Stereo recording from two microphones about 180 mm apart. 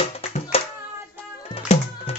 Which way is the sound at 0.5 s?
35° left (ahead or behind).